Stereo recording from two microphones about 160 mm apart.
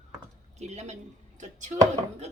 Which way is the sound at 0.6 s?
45° right (ahead or behind).